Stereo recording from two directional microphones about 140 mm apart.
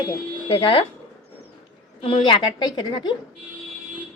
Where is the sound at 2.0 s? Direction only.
35° left (ahead or behind).